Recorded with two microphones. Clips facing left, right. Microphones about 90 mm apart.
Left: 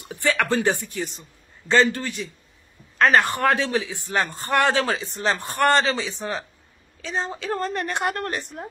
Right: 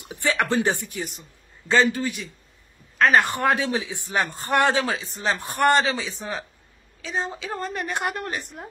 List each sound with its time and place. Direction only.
0.0 s speech: 20° right (ahead or behind)
1.7 s a woman's voice: 5° right (ahead or behind)
3.2 s a man's voice: 20° right (ahead or behind)
4.8 s a woman's voice: centre (ahead or behind)
5.4 s a man's voice: 15° right (ahead or behind)